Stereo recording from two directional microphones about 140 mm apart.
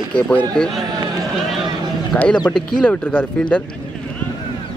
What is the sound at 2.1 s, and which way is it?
Speech, 10° left (ahead or behind).